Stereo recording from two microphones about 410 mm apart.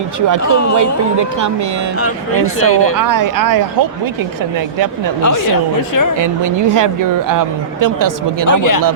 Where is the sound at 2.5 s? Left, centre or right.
Left.